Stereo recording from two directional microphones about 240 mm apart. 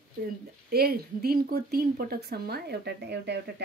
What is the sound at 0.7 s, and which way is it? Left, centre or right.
Speech, right.